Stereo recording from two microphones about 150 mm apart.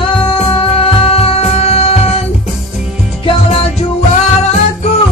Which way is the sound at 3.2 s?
40° left (ahead or behind).